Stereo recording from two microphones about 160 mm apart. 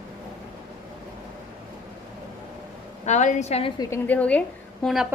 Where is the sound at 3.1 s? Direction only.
50° left (ahead or behind).